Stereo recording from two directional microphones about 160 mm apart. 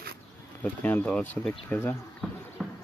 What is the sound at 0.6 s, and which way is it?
Speech, 10° left (ahead or behind).